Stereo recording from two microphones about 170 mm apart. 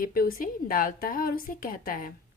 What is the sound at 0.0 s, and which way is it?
A woman's voice, 60° left (ahead or behind).